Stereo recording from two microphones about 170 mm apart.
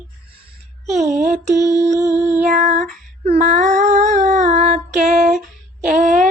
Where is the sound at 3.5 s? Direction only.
45° right (ahead or behind).